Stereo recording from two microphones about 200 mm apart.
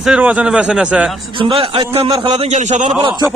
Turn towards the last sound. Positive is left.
turn(degrees=-35)  # may be behind; listen again after turning